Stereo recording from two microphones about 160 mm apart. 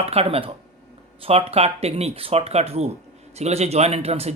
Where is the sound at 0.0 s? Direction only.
40° right (ahead or behind).